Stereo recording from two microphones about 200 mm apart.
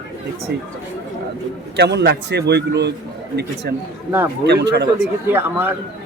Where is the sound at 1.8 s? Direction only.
55° right (ahead or behind).